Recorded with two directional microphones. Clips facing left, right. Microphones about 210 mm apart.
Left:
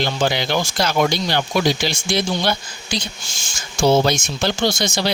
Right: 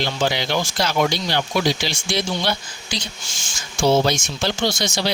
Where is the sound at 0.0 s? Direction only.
50° left (ahead or behind).